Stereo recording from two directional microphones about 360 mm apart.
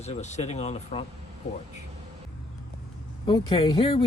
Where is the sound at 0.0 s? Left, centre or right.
Centre.